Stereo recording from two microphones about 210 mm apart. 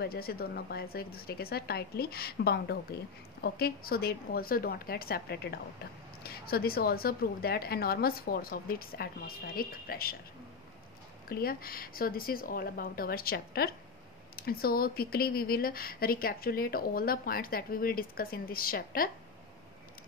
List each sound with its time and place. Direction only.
0.0 s speech: 45° left (ahead or behind)
11.2 s speech: 45° left (ahead or behind)